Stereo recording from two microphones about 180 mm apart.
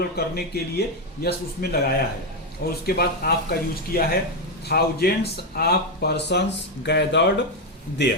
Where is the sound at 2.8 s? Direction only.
60° left (ahead or behind).